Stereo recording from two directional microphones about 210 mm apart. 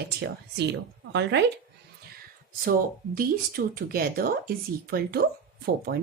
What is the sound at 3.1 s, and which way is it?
Speech, 45° right (ahead or behind).